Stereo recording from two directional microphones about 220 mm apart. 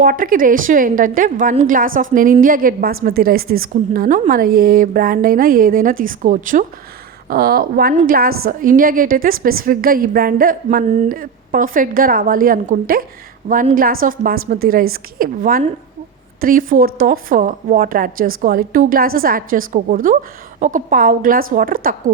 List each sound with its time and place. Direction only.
0.0 s a woman's voice: 40° right (ahead or behind)